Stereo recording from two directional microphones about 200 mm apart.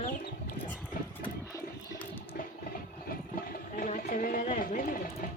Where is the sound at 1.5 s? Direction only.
15° left (ahead or behind).